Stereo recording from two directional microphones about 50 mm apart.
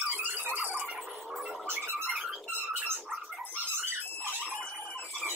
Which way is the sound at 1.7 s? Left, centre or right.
Right.